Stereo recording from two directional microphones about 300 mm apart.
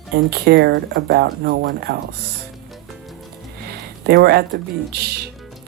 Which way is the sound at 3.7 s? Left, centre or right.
Right.